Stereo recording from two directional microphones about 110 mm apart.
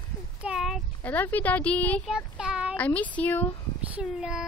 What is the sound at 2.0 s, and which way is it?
Child singing, 5° right (ahead or behind).